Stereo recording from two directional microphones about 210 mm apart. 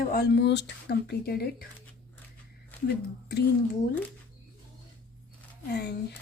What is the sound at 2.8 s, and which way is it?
Speech, 50° left (ahead or behind).